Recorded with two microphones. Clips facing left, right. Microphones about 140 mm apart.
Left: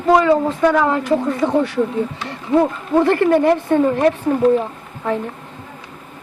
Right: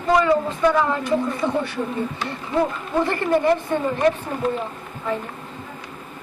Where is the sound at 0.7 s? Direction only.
90° left.